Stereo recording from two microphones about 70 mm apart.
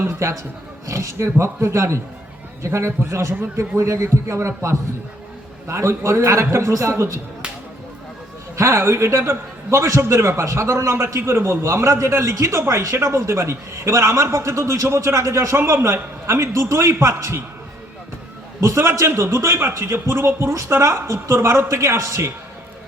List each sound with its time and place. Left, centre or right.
0.0 s a man's voice: right
8.5 s a man's voice: right
18.6 s a man's voice: right